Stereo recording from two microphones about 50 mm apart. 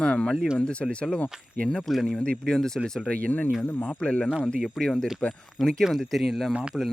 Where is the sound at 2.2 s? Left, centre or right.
Centre.